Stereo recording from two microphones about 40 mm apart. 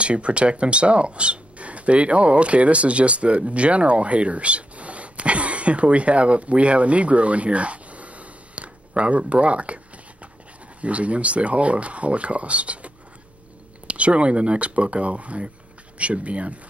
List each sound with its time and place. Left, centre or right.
0.0 s speech: right
10.8 s speech: right